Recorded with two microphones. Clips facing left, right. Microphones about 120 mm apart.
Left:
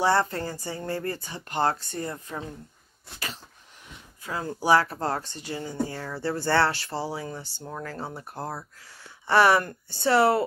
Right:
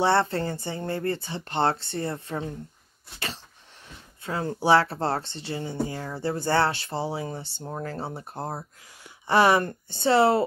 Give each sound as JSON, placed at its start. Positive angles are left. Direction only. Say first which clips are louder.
{"t": 0.0, "sound": "speech", "louder": "right 1 dB", "side_deg": -25}
{"t": 4.2, "sound": "speech", "louder": "right 3 dB", "side_deg": -30}